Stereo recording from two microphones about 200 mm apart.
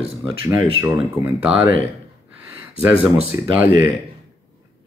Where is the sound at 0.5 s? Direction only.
10° right (ahead or behind).